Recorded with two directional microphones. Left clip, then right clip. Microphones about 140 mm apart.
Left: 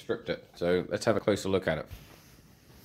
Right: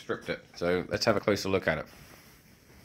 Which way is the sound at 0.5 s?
5° left (ahead or behind).